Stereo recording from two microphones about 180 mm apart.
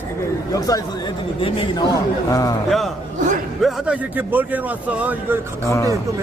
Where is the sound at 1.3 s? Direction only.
30° left (ahead or behind).